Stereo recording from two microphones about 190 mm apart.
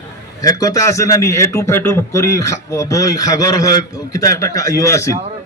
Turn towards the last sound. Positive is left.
turn(degrees=15)  # may be behind; listen again after turning